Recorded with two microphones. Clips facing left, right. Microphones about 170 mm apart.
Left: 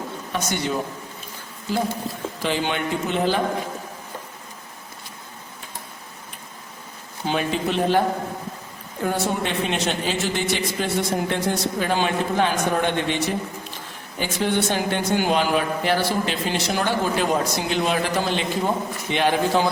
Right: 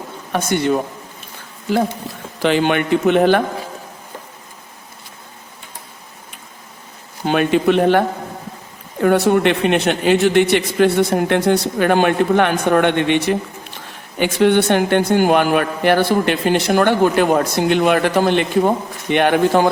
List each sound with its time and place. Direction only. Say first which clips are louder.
0.3 s speech: right 8 dB; 55° right (ahead or behind)
2.4 s speech: right 9 dB; 65° right (ahead or behind)
7.3 s speech: right 9 dB; 65° right (ahead or behind)